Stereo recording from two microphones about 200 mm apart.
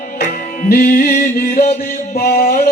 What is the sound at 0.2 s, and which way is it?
Music, 50° left (ahead or behind).